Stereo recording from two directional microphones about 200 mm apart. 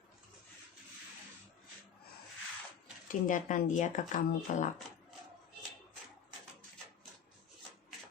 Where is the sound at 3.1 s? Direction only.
40° left (ahead or behind).